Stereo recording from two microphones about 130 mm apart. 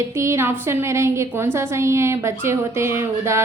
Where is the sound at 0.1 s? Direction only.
20° right (ahead or behind).